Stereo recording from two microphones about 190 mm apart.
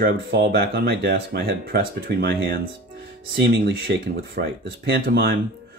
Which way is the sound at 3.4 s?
65° right (ahead or behind).